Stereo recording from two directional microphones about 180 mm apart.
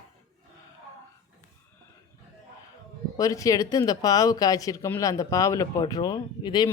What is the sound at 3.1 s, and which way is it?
Speech, 20° left (ahead or behind).